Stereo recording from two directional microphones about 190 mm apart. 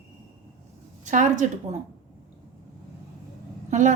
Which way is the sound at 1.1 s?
40° right (ahead or behind).